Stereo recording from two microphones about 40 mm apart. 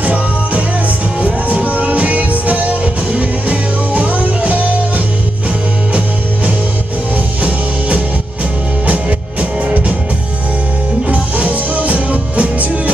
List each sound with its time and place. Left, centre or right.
0.0 s music: right
8.8 s music: right
11.1 s music: right